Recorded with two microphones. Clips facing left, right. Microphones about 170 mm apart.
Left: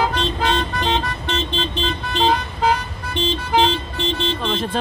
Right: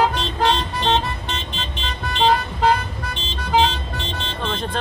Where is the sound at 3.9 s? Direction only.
70° right (ahead or behind).